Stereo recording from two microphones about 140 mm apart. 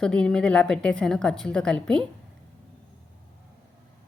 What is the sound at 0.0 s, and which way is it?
A woman's voice, 5° left (ahead or behind).